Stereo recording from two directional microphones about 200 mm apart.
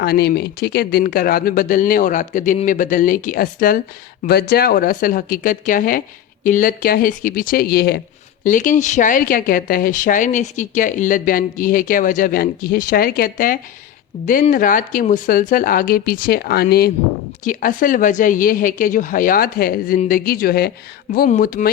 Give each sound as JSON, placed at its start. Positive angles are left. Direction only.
{"t": 0.0, "sound": "speech", "side_deg": 50}
{"t": 8.4, "sound": "speech", "side_deg": 40}